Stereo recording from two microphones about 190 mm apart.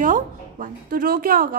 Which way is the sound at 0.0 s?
45° right (ahead or behind).